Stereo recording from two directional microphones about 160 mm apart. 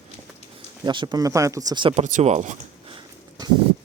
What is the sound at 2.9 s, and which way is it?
Dog, 25° right (ahead or behind).